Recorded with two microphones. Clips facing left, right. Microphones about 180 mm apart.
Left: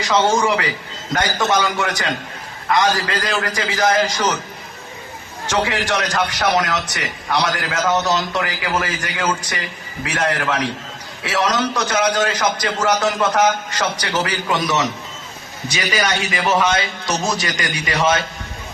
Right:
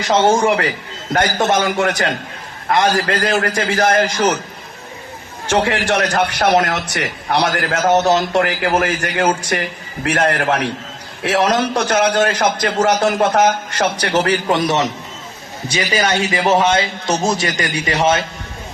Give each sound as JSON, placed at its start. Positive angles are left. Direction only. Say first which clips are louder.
{"t": 0.4, "sound": "a man's voice", "louder": "right 3 dB", "side_deg": -50}
{"t": 5.5, "sound": "a man's voice", "louder": "right 4 dB", "side_deg": -50}
{"t": 14.5, "sound": "a man's voice", "louder": "right 3 dB", "side_deg": -25}